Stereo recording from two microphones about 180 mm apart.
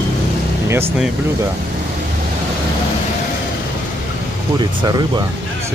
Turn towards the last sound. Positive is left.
turn(degrees=-20)  # may be behind; listen again after turning